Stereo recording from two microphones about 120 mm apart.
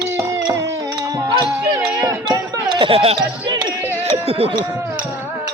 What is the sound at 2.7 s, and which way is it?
Speech, 45° right (ahead or behind).